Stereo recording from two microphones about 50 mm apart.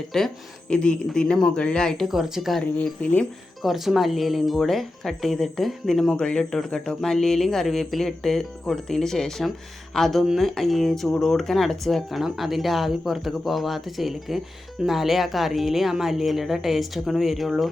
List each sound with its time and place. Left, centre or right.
0.1 s speech: centre
0.7 s speech: left
2.0 s speech: centre
3.0 s speech: left
3.6 s speech: centre
6.1 s speech: centre